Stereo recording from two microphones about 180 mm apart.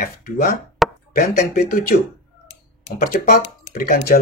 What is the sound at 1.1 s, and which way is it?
Speech, 50° left (ahead or behind).